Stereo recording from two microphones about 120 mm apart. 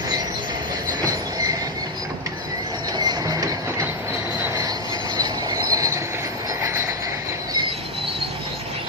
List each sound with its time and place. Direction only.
3.0 s train: 35° right (ahead or behind)
5.1 s train: 35° right (ahead or behind)